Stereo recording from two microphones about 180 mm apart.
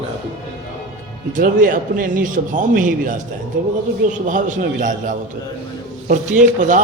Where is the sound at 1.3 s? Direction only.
50° right (ahead or behind).